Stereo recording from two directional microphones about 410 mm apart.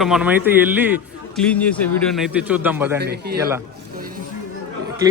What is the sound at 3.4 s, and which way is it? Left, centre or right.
Speech, centre.